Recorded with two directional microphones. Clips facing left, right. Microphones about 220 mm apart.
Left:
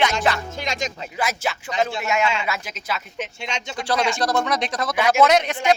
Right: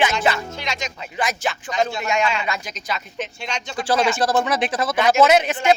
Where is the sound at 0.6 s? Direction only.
45° left (ahead or behind).